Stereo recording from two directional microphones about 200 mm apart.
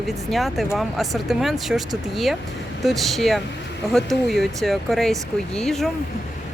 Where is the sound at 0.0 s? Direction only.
Centre (ahead or behind).